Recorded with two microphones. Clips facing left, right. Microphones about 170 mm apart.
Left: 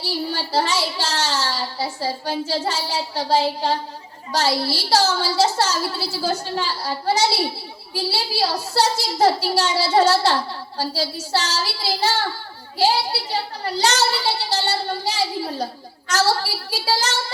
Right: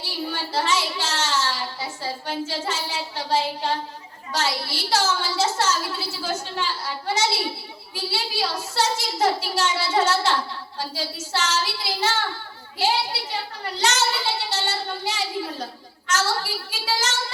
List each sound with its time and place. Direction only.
0.0 s a woman's voice: 35° left (ahead or behind)